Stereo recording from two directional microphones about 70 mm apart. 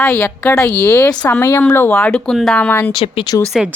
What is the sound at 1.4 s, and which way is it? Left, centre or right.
Speech, left.